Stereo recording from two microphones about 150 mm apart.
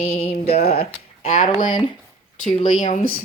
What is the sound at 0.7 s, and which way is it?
Speech, 40° left (ahead or behind).